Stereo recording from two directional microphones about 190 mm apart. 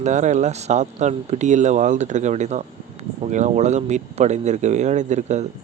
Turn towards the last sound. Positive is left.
turn(degrees=-40)  # may be behind; listen again after turning